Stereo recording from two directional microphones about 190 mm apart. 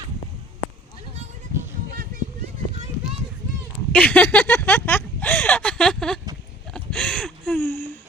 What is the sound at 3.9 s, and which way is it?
Speech, 5° left (ahead or behind).